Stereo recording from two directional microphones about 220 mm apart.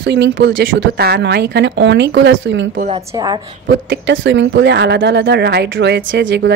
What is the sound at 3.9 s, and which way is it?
A woman's voice, 55° right (ahead or behind).